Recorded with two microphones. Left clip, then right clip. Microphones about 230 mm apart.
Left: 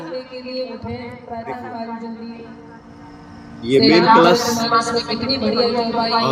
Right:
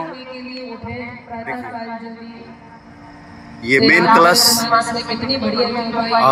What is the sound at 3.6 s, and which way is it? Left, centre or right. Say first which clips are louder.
Speech: right 1 dB; right.